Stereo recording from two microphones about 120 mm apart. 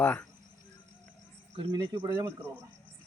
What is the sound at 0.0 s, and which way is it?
Speech, 15° left (ahead or behind).